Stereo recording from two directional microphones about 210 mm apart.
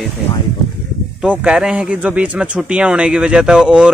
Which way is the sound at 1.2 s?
5° right (ahead or behind).